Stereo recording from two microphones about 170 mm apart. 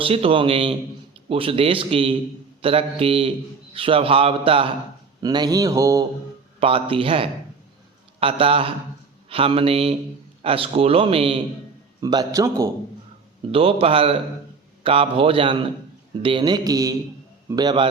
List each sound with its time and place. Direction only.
0.0 s a man's voice: 35° right (ahead or behind)
5.2 s mantra: 25° right (ahead or behind)
6.6 s a man's voice: 30° right (ahead or behind)
11.9 s mantra: 25° right (ahead or behind)
13.5 s a man's voice: 35° right (ahead or behind)
16.2 s mantra: 30° right (ahead or behind)